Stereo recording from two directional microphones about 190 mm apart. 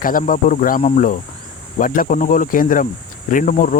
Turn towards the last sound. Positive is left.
turn(degrees=45)  # may be behind; listen again after turning